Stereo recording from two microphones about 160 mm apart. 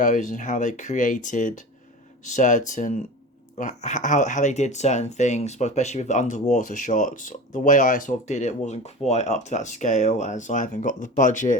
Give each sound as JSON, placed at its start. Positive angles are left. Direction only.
{"t": 0.0, "sound": "speech", "side_deg": 50}